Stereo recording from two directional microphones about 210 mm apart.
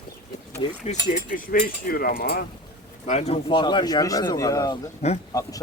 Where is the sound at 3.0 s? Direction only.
35° left (ahead or behind).